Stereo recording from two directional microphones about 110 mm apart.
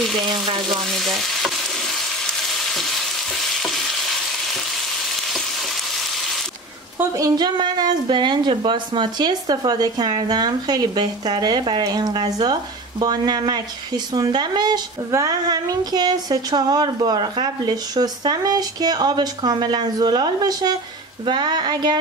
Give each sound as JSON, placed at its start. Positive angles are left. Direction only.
{"t": 0.9, "sound": "stir", "side_deg": 0}
{"t": 2.6, "sound": "frying", "side_deg": 0}
{"t": 7.0, "sound": "speech", "side_deg": -30}
{"t": 21.3, "sound": "a sound", "side_deg": -45}